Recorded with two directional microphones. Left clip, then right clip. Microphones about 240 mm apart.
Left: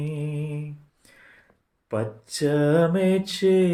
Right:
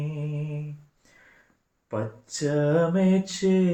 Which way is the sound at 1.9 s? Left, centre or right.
Left.